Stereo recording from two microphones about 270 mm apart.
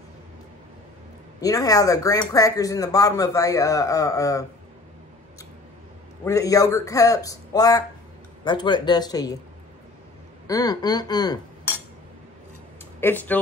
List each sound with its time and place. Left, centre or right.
1.4 s speech: centre
6.2 s speech: centre
10.4 s speech: centre
13.0 s speech: centre